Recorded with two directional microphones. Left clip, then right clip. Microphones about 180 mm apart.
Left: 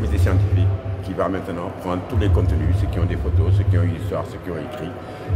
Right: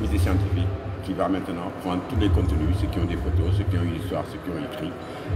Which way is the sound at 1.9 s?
15° left (ahead or behind).